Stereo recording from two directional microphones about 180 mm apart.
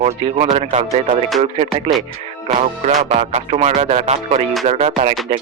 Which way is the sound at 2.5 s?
40° right (ahead or behind).